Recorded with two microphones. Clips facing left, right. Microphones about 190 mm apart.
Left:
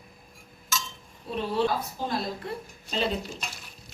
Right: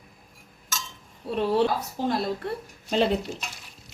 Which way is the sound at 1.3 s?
65° right (ahead or behind).